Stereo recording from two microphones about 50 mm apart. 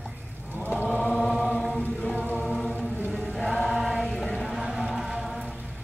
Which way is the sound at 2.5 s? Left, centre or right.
Centre.